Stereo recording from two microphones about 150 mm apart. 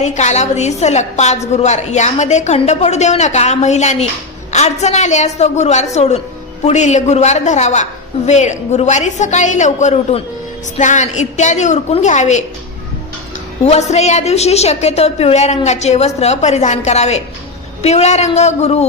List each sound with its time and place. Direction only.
0.0 s a woman's voice: 50° left (ahead or behind)
13.7 s a woman's voice: 50° left (ahead or behind)